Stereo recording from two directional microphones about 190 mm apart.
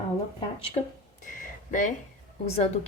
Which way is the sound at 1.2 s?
45° left (ahead or behind).